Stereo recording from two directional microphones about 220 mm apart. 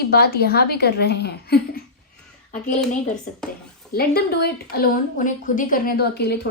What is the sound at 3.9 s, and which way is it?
A woman's voice, 45° left (ahead or behind).